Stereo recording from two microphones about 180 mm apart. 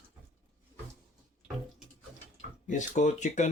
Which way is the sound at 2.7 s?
40° left (ahead or behind).